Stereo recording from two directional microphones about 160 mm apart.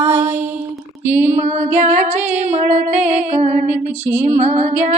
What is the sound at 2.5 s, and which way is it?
Female singing, 40° right (ahead or behind).